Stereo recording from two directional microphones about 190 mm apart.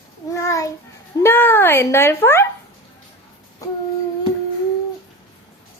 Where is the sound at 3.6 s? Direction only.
15° left (ahead or behind).